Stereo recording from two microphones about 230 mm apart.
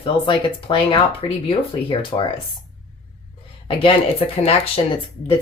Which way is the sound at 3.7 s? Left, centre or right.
Left.